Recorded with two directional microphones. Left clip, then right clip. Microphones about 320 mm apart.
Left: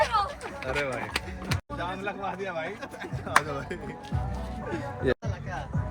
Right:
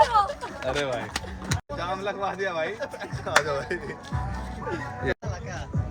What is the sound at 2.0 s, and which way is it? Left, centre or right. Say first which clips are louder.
Speech: right 4 dB; right.